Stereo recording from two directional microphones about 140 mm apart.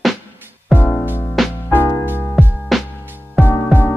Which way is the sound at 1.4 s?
Centre (ahead or behind).